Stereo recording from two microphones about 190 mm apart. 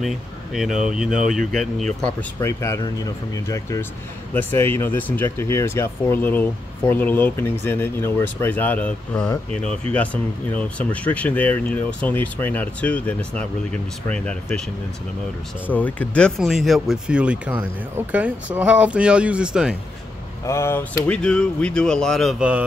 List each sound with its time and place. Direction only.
0.6 s speech: 5° right (ahead or behind)
2.4 s speech: 15° left (ahead or behind)
15.7 s speech: 10° left (ahead or behind)
20.4 s speech: 15° left (ahead or behind); by 22.6 s 5° right (ahead or behind)